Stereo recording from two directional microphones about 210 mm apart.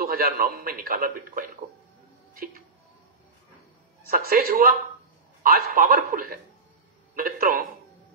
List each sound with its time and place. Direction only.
0.0 s a man's voice: 45° right (ahead or behind)
2.3 s music: 45° right (ahead or behind)
4.0 s a man's voice: 45° right (ahead or behind)